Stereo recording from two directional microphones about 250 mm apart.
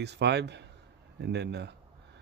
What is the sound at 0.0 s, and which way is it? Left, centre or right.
Speech, right.